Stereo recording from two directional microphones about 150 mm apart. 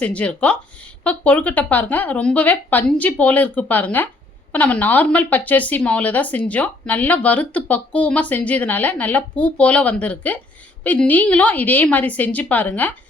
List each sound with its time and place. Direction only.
0.0 s a woman's voice: 10° left (ahead or behind)